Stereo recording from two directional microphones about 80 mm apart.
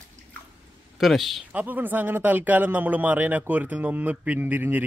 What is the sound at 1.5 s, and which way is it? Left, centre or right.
A man's voice, right.